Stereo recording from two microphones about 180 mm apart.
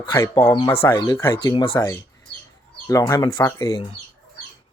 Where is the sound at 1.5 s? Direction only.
30° left (ahead or behind).